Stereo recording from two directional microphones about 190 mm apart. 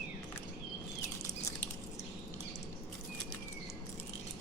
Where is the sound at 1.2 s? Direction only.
15° left (ahead or behind).